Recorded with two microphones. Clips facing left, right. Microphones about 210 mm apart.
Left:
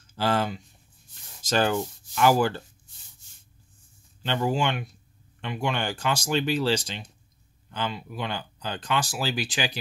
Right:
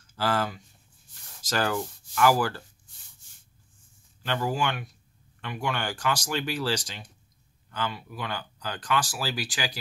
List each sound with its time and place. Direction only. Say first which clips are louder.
0.0 s speech: left 2 dB; 25° left (ahead or behind)
4.2 s speech: left 2 dB; 20° left (ahead or behind)